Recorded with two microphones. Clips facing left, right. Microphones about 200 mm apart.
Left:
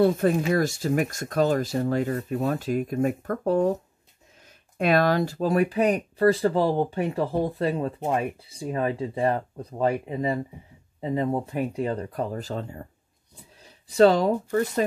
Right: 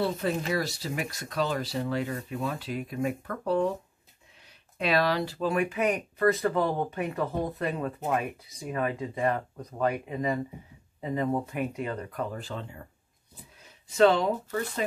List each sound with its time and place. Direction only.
0.0 s speech: 50° left (ahead or behind)
4.7 s speech: 50° left (ahead or behind)
13.8 s speech: 35° left (ahead or behind)